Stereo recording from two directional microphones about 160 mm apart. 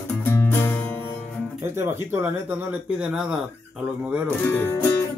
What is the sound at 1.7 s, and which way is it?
Speech, 20° right (ahead or behind).